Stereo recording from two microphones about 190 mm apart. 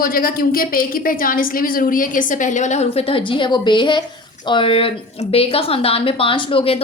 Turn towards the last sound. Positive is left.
turn(degrees=30)  # may be behind; listen again after turning